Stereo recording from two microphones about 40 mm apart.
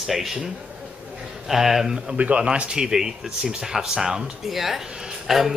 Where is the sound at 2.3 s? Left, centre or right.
Right.